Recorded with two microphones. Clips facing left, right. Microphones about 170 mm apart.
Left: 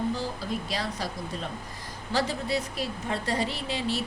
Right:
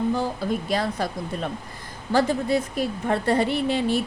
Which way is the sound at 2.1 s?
50° right (ahead or behind).